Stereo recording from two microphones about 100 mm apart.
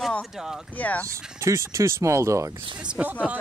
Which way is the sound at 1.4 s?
30° right (ahead or behind).